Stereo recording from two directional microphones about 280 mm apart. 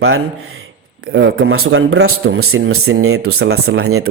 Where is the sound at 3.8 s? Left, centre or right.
Right.